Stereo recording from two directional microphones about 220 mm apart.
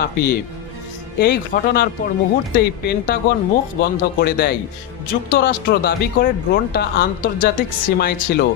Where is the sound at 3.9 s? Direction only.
45° left (ahead or behind).